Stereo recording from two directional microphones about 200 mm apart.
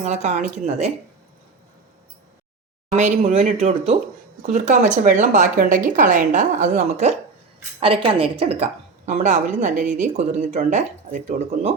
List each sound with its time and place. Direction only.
0.0 s a woman's voice: 35° right (ahead or behind)
2.9 s a woman's voice: 35° right (ahead or behind)